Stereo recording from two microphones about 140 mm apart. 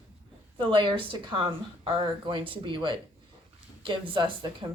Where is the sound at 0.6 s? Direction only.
35° right (ahead or behind).